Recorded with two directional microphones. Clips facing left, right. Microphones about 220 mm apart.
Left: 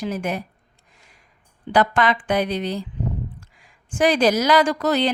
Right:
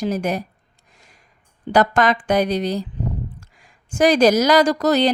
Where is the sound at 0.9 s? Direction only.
40° right (ahead or behind).